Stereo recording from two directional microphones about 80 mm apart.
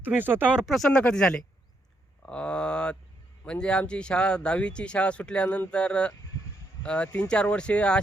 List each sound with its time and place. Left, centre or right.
0.0 s speech: right
0.5 s speech: centre
0.9 s speech: centre